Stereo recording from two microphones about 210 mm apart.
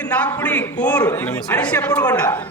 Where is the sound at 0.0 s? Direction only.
5° left (ahead or behind).